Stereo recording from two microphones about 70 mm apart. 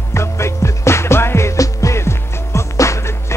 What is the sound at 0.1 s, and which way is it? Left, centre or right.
Music, left.